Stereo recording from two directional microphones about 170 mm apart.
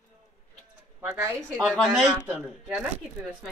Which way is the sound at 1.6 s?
Centre (ahead or behind).